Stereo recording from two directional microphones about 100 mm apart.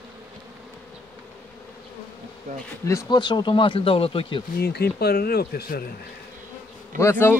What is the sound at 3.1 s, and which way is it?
Speech, 50° left (ahead or behind).